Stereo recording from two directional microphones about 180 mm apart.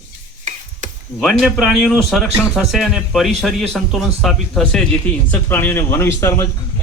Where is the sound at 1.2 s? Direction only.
Centre (ahead or behind).